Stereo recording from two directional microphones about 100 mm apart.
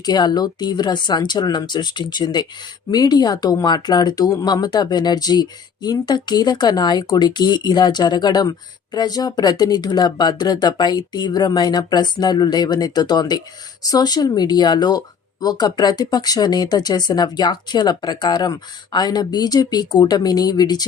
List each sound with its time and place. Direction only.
0.0 s speech: 45° left (ahead or behind)